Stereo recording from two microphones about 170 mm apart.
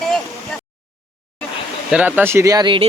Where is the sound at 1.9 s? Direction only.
10° right (ahead or behind); by 2.9 s 30° right (ahead or behind).